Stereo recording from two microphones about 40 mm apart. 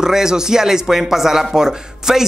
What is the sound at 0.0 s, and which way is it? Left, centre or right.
Speech, centre.